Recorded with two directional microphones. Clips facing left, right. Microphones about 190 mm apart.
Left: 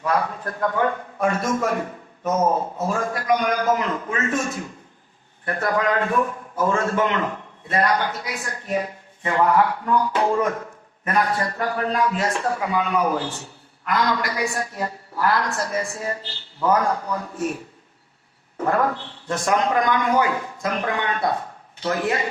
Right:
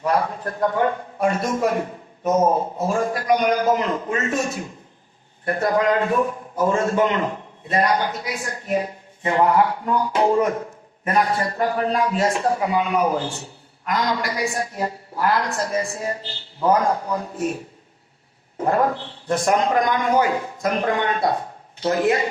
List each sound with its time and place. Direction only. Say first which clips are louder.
0.0 s a man's voice: right 2 dB; 15° right (ahead or behind)
18.6 s a man's voice: right 2 dB; 15° right (ahead or behind)
21.8 s a man's voice: right 4 dB; 20° right (ahead or behind)